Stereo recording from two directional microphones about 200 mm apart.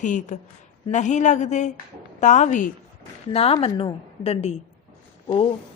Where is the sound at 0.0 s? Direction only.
40° left (ahead or behind).